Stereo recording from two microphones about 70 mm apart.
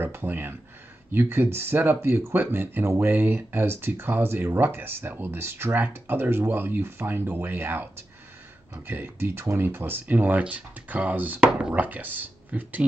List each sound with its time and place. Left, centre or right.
0.0 s speech: right